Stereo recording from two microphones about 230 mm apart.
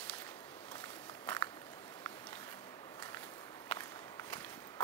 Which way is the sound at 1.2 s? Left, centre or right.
Centre.